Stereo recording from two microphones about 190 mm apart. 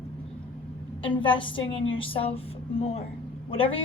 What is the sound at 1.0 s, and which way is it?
A woman's voice, 25° left (ahead or behind).